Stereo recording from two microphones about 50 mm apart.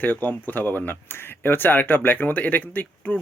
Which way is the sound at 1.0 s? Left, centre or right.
Left.